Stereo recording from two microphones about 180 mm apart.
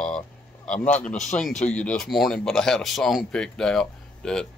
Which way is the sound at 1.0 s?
Centre (ahead or behind).